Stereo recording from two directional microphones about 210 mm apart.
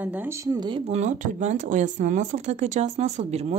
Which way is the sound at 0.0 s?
10° right (ahead or behind).